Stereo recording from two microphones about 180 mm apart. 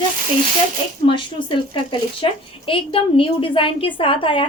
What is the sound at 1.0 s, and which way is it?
Speech, 30° left (ahead or behind).